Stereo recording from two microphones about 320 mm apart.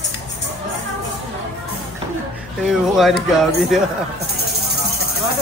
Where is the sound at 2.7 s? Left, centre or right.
Centre.